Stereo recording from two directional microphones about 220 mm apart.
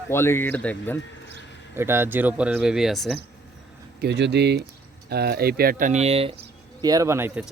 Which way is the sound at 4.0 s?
50° right (ahead or behind).